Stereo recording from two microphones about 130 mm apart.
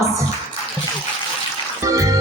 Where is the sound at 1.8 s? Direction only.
25° right (ahead or behind).